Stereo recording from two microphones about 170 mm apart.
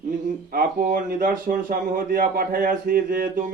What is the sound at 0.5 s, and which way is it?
A man's voice, 55° right (ahead or behind).